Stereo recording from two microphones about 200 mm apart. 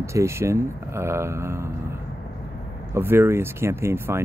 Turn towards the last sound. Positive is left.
turn(degrees=-10)  # may be behind; listen again after turning